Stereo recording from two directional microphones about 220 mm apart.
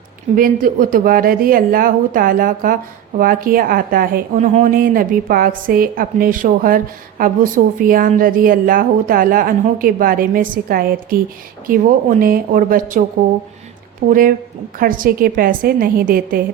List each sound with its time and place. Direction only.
0.3 s a woman's voice: 40° right (ahead or behind)
14.1 s a woman's voice: 40° right (ahead or behind)